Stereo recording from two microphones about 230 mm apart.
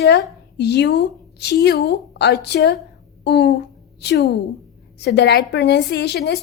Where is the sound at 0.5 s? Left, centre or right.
Left.